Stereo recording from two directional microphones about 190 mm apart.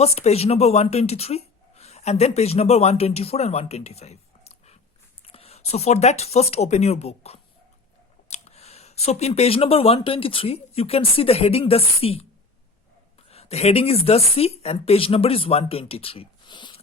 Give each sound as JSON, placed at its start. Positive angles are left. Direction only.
{"t": 0.0, "sound": "a woman's voice", "side_deg": 35}
{"t": 13.2, "sound": "speech", "side_deg": 30}